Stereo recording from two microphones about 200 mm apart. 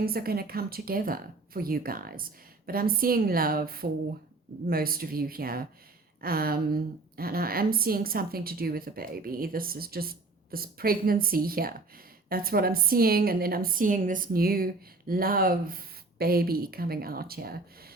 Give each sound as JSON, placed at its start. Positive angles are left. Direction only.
{"t": 0.0, "sound": "a woman's voice", "side_deg": -50}